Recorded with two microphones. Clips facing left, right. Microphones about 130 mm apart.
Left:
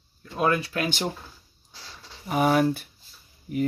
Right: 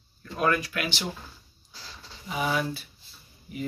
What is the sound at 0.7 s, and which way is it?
Speech, 45° left (ahead or behind).